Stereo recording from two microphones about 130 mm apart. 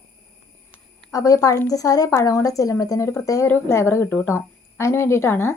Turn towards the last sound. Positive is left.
turn(degrees=20)  # may be behind; listen again after turning